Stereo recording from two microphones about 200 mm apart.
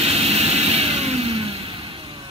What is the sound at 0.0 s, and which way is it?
Vehicle, 30° right (ahead or behind).